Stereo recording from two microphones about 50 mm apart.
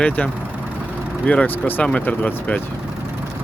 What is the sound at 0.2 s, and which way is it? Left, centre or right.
Speech, left.